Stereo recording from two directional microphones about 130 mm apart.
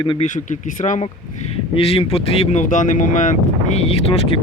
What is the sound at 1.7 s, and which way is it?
Speech, 45° left (ahead or behind).